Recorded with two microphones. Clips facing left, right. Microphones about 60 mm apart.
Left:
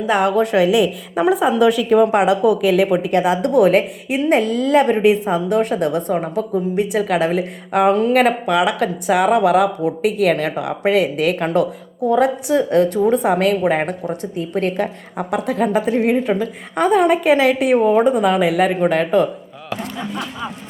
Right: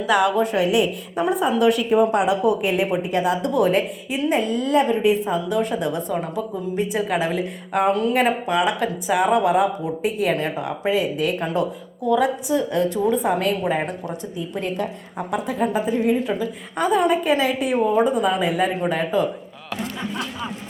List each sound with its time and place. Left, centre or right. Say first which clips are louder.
0.1 s speech: left 2 dB; left
1.2 s speech: left 4 dB; left
4.3 s speech: left 5 dB; left
5.3 s a woman's voice: left 4 dB; left
8.1 s a woman's voice: left 5 dB; left
13.7 s a woman's voice: left 5 dB; left
18.9 s a woman's voice: left 5 dB; left